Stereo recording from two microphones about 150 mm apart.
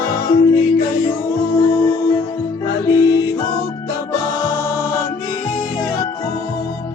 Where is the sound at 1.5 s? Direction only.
25° left (ahead or behind).